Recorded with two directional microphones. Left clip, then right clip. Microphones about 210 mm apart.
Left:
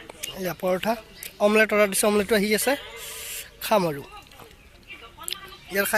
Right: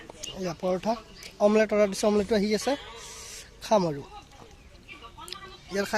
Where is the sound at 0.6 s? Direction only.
Centre (ahead or behind).